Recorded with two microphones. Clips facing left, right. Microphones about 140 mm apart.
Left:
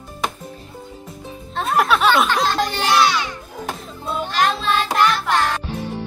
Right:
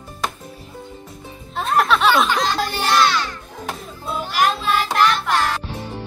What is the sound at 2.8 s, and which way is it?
Speech, 10° left (ahead or behind).